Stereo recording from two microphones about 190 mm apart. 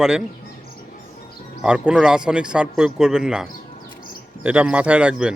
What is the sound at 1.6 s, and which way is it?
A man's voice, 5° right (ahead or behind).